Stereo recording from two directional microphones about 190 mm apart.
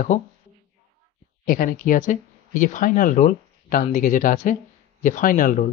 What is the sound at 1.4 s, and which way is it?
Speech, 45° left (ahead or behind).